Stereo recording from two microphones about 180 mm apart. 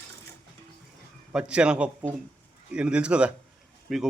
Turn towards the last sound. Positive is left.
turn(degrees=0)  # may be behind; listen again after turning